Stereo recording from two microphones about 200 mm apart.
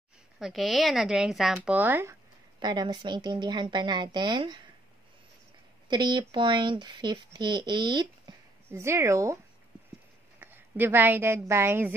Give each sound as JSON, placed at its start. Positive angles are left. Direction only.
{"t": 0.4, "sound": "speech", "side_deg": 0}
{"t": 2.6, "sound": "speech", "side_deg": -20}
{"t": 5.9, "sound": "speech", "side_deg": -20}
{"t": 10.4, "sound": "a woman's voice", "side_deg": -10}